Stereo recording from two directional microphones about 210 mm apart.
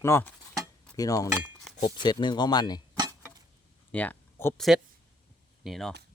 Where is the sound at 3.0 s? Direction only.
15° right (ahead or behind).